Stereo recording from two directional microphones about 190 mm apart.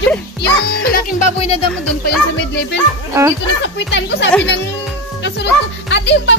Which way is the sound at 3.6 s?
70° left (ahead or behind).